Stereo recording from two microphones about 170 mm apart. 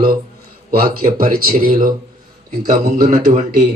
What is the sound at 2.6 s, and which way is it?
A man's voice, 55° right (ahead or behind).